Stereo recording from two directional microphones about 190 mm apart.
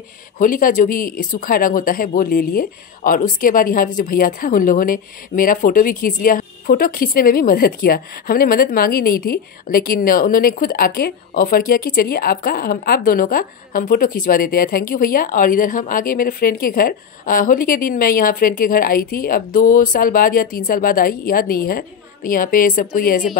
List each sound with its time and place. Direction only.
0.4 s speech: 45° left (ahead or behind)